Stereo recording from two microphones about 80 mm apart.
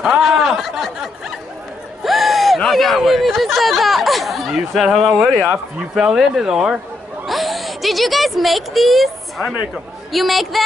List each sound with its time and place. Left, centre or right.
0.0 s speech: centre
10.1 s speech: centre